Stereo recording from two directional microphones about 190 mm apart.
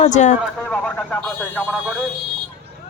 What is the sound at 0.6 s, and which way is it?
Speech, 5° left (ahead or behind).